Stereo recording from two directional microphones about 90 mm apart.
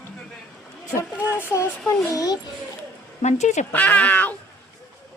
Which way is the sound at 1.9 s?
40° left (ahead or behind).